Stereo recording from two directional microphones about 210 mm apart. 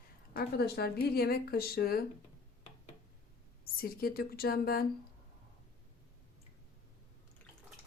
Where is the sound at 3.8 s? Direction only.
45° left (ahead or behind).